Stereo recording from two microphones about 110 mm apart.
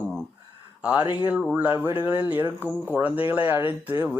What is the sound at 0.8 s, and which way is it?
Speech, 10° right (ahead or behind).